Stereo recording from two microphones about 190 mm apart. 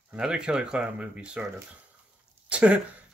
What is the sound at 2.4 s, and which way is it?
Speech, 5° right (ahead or behind).